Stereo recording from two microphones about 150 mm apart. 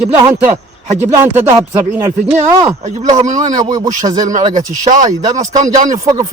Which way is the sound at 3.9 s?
55° right (ahead or behind).